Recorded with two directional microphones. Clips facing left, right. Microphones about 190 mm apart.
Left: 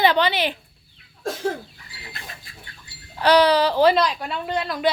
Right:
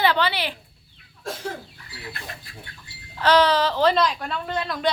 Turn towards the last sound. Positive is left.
turn(degrees=5)  # may be behind; listen again after turning